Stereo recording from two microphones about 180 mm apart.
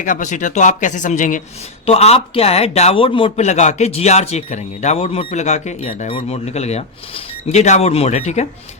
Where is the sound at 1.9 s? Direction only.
35° left (ahead or behind).